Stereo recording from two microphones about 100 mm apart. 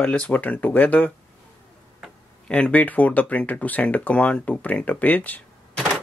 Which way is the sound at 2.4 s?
10° left (ahead or behind).